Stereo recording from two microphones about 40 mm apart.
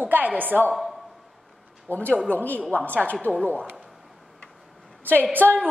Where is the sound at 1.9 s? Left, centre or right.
Right.